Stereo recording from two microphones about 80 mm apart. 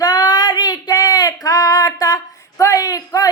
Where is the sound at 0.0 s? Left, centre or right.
Left.